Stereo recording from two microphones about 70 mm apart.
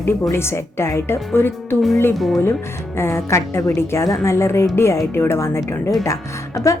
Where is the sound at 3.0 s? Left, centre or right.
Left.